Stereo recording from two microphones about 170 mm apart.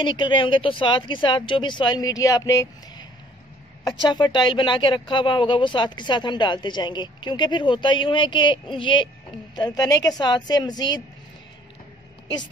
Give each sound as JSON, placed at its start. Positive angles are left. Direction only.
{"t": 0.0, "sound": "speech", "side_deg": 30}